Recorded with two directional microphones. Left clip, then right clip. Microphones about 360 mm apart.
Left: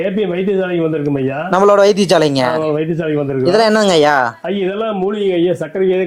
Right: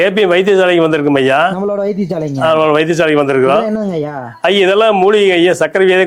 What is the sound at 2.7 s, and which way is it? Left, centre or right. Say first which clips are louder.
Speech: right 7 dB; centre.